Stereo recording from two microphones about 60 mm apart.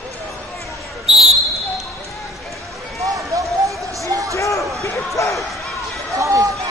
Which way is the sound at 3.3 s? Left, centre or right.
Right.